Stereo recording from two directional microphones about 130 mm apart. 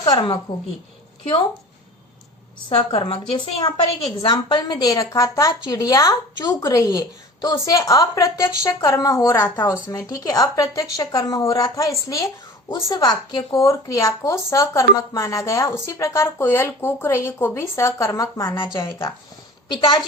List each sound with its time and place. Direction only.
0.0 s a woman's voice: 35° left (ahead or behind)
2.6 s a woman's voice: 45° left (ahead or behind); by 19.1 s 20° left (ahead or behind)
19.7 s a woman's voice: 35° left (ahead or behind)